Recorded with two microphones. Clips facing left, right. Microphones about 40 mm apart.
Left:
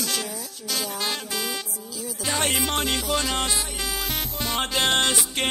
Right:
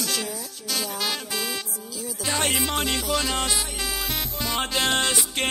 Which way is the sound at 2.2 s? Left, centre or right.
Centre.